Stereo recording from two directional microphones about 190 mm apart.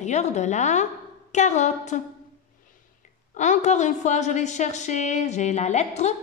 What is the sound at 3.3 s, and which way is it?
A woman's voice, 40° left (ahead or behind).